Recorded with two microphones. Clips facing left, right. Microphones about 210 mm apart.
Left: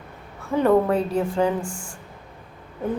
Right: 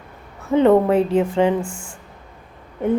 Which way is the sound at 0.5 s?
20° right (ahead or behind).